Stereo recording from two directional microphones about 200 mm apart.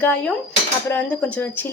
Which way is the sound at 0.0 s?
5° left (ahead or behind).